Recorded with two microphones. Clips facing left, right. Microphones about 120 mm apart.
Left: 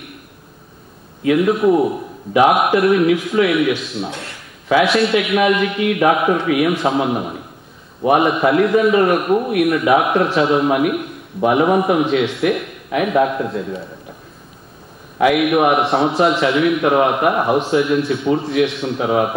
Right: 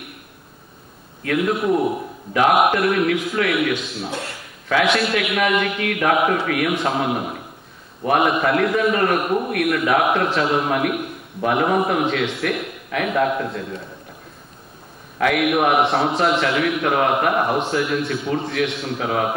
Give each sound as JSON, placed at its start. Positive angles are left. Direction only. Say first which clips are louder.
{"t": 1.2, "sound": "a man's voice", "louder": "left 6 dB", "side_deg": 5}
{"t": 15.3, "sound": "a man's voice", "louder": "even", "side_deg": 0}